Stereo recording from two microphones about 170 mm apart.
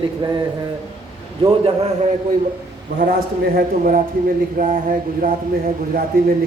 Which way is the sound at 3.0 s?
60° right (ahead or behind).